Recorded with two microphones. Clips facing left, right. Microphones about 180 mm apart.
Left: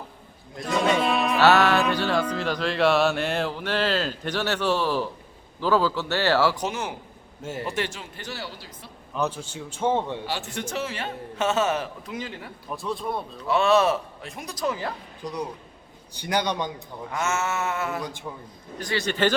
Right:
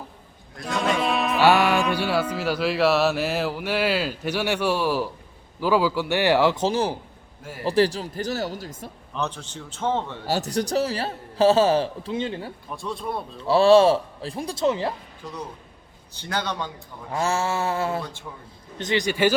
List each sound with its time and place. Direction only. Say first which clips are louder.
0.6 s music: left 1 dB; centre (ahead or behind)
1.4 s music: even; 10° right (ahead or behind); by 6.9 s 35° right (ahead or behind)
7.6 s a man's voice: right 10 dB; 35° right (ahead or behind)
9.1 s a man's voice: left 2 dB; 10° left (ahead or behind)
10.2 s a man's voice: right 7 dB; 40° right (ahead or behind)
12.7 s speech: left 1 dB; centre (ahead or behind)
13.5 s a man's voice: right 5 dB; 30° right (ahead or behind)
15.2 s a man's voice: left 7 dB; 15° left (ahead or behind)
17.1 s a man's voice: right 3 dB; 30° right (ahead or behind)
18.3 s a man's voice: left 3 dB; 15° left (ahead or behind)
18.8 s music: right 3 dB; 20° right (ahead or behind)